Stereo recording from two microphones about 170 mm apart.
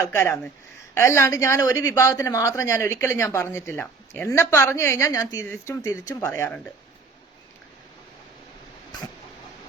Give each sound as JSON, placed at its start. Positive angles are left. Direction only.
{"t": 0.0, "sound": "speech", "side_deg": 15}